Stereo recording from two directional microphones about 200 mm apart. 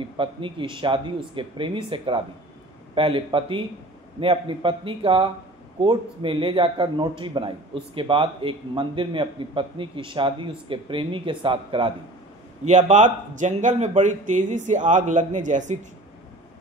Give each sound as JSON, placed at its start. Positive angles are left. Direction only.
{"t": 0.0, "sound": "a man's voice", "side_deg": -25}